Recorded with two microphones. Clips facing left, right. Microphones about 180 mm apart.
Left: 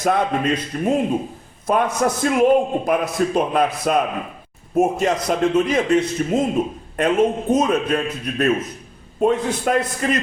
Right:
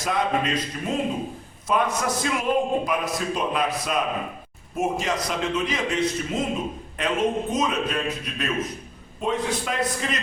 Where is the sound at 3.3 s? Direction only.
50° left (ahead or behind).